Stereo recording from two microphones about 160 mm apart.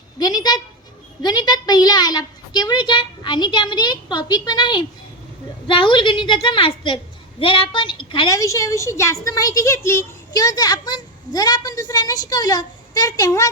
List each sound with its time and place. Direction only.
0.2 s a woman's voice: 25° left (ahead or behind)
8.3 s speech: 20° left (ahead or behind)